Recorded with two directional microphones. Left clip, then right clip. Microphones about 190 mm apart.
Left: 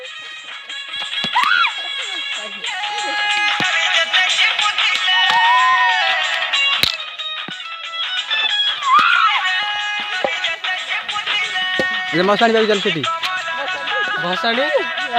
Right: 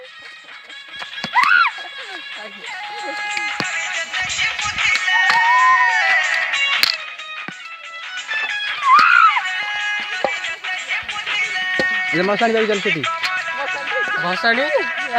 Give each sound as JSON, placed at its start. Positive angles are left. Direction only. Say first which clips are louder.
{"t": 2.8, "sound": "a sound", "louder": "left 6 dB", "side_deg": 50}
{"t": 3.7, "sound": "music", "louder": "left 7 dB", "side_deg": 35}
{"t": 8.1, "sound": "music", "louder": "left 4 dB", "side_deg": 30}
{"t": 9.0, "sound": "a sound", "louder": "right 2 dB", "side_deg": 0}
{"t": 9.4, "sound": "music", "louder": "left 3 dB", "side_deg": 35}
{"t": 14.7, "sound": "speech", "louder": "left 1 dB", "side_deg": 25}